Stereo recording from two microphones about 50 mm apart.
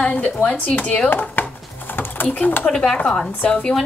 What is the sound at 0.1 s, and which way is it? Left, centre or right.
Speech, left.